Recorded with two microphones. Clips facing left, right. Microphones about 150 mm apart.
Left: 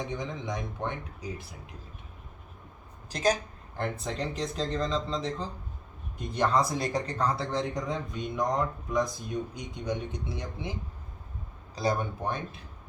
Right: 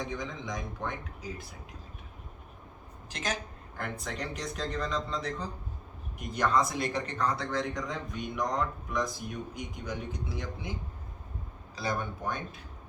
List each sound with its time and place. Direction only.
0.0 s speech: 25° left (ahead or behind)
3.1 s a woman's voice: 35° left (ahead or behind)
3.8 s speech: 25° left (ahead or behind)
11.7 s a man's voice: 35° left (ahead or behind)